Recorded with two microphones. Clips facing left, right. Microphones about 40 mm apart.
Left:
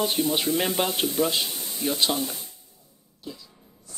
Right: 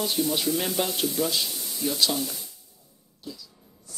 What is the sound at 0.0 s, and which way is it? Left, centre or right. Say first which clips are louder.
Speech: left 2 dB; left.